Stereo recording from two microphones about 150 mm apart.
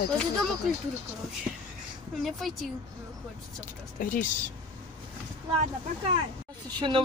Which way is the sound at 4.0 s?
60° left (ahead or behind).